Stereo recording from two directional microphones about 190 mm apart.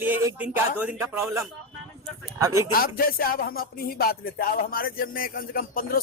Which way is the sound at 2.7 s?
50° left (ahead or behind).